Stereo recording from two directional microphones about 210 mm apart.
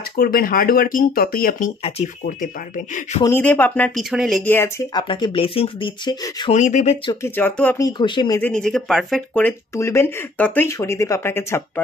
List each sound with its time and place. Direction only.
0.2 s speech: 45° left (ahead or behind)
3.3 s speech: 10° left (ahead or behind)
4.5 s speech: 10° left (ahead or behind)
5.0 s speech: 25° left (ahead or behind)
6.5 s speech: 35° left (ahead or behind)
7.2 s speech: 10° left (ahead or behind)
8.0 s speech: 20° left (ahead or behind)
8.4 s speech: 5° left (ahead or behind)